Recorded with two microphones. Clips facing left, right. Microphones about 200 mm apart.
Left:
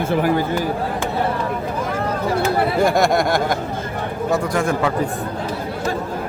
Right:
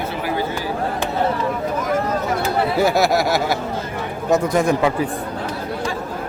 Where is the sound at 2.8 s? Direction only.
5° right (ahead or behind).